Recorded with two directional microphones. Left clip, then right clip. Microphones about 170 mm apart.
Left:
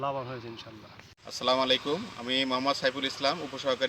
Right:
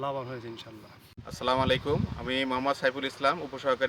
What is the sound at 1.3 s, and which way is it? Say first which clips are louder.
Speech: left 1 dB; 35° right (ahead or behind).